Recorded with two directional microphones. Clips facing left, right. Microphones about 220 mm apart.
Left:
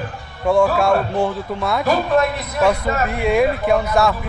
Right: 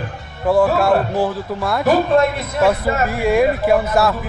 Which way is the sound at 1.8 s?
25° right (ahead or behind).